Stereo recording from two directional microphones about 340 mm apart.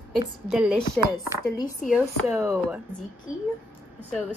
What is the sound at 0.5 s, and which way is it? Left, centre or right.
Speech, centre.